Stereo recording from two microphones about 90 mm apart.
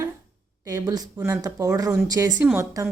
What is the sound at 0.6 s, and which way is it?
A woman's voice, 40° right (ahead or behind).